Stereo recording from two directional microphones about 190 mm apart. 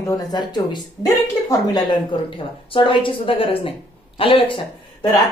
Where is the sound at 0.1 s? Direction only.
20° left (ahead or behind).